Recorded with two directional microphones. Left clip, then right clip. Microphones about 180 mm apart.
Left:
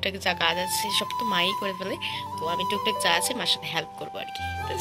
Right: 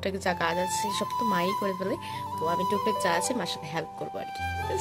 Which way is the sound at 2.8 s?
35° right (ahead or behind).